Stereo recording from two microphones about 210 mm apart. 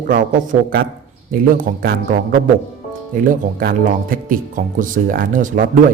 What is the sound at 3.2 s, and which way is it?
A man's voice, 40° right (ahead or behind).